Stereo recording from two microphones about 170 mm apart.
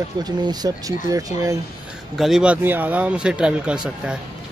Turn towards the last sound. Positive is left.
turn(degrees=-5)  # may be behind; listen again after turning